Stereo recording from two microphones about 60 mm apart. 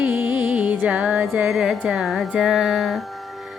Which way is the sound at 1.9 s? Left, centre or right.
Centre.